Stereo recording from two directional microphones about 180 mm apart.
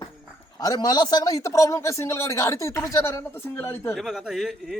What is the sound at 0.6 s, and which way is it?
A man's voice, 20° left (ahead or behind).